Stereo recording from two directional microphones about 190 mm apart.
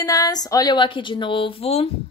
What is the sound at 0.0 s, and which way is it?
A woman's voice, 20° left (ahead or behind).